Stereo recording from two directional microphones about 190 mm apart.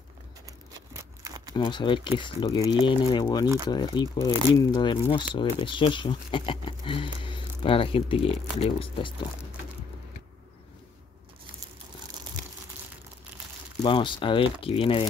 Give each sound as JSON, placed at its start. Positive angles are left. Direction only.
{"t": 0.7, "sound": "a sound", "side_deg": -20}
{"t": 1.5, "sound": "speech", "side_deg": 25}
{"t": 13.8, "sound": "speech", "side_deg": 25}